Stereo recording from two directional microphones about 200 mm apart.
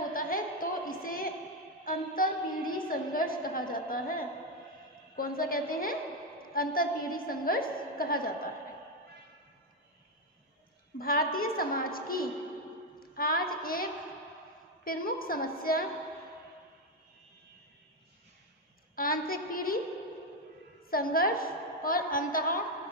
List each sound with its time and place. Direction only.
0.1 s a sound: 45° left (ahead or behind)
5.1 s a woman's voice: 45° left (ahead or behind)
11.0 s a woman's voice: 45° left (ahead or behind)
14.9 s a woman's voice: 45° left (ahead or behind)
18.9 s a woman's voice: 45° left (ahead or behind)
20.8 s a woman's voice: 45° left (ahead or behind)